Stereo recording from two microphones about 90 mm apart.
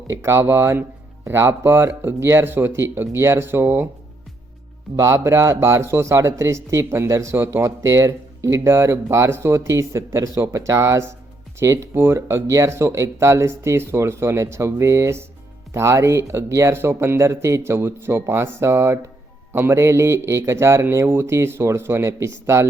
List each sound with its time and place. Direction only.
0.1 s speech: 30° right (ahead or behind)
4.9 s a man's voice: 30° right (ahead or behind)